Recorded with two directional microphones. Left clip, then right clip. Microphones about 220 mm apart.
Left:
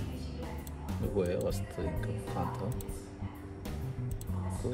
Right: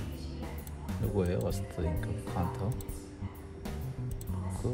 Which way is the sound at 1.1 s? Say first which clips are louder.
Left 1 dB; 25° right (ahead or behind).